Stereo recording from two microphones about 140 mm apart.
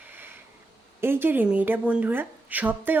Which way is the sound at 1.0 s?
15° right (ahead or behind).